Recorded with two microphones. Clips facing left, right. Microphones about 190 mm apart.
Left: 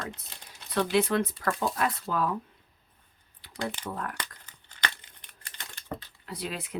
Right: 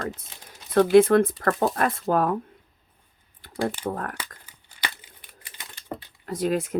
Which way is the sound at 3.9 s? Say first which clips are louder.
Right 6 dB; 50° right (ahead or behind).